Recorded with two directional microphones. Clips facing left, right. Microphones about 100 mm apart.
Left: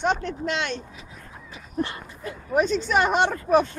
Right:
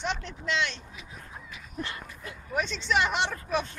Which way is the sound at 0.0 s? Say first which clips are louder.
Left 8 dB; 50° left (ahead or behind).